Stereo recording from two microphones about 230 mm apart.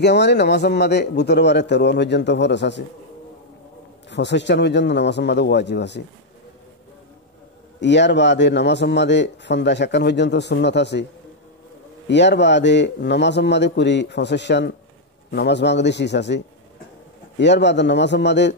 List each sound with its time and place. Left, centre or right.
0.0 s speech: left
4.1 s speech: left
7.8 s speech: left
12.1 s speech: left